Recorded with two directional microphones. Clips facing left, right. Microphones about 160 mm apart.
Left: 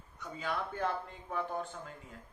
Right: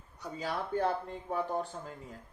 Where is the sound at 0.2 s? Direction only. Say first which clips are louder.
Right 1 dB; 35° right (ahead or behind).